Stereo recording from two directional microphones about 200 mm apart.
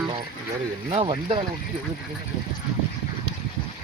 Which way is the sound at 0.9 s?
25° right (ahead or behind).